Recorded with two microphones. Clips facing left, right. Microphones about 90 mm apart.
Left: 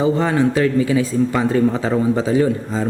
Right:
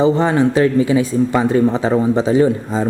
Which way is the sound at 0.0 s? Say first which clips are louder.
Right 3 dB; 20° right (ahead or behind).